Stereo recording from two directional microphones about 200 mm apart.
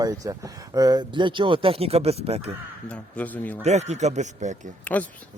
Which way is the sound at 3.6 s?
35° right (ahead or behind).